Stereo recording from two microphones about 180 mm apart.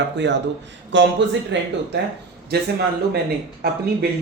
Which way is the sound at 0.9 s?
85° right.